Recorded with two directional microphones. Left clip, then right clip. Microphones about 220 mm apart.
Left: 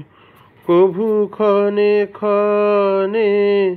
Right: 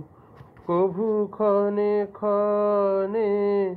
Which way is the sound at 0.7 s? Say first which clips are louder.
Left 9 dB; 30° left (ahead or behind).